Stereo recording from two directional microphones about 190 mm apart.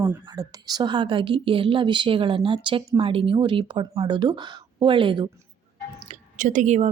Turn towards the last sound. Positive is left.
turn(degrees=-40)  # may be behind; listen again after turning